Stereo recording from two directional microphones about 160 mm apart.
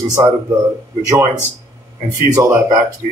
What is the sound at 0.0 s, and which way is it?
Speech, 20° right (ahead or behind).